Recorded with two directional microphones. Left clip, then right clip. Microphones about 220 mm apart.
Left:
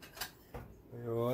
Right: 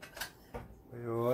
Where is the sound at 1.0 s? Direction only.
20° right (ahead or behind).